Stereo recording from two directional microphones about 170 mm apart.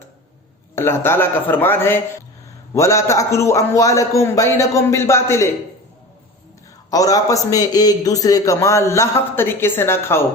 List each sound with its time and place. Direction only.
0.8 s a man's voice: 15° left (ahead or behind)
6.9 s a man's voice: 20° left (ahead or behind)